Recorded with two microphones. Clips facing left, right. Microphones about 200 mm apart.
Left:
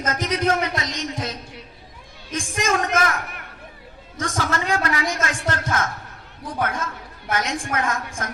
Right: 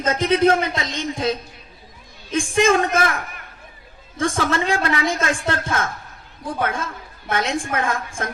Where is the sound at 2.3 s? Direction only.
30° right (ahead or behind).